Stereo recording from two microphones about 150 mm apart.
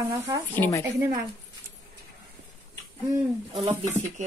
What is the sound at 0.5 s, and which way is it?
Speech, 15° left (ahead or behind).